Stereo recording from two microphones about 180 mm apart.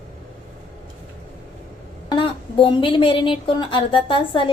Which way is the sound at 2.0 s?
30° left (ahead or behind).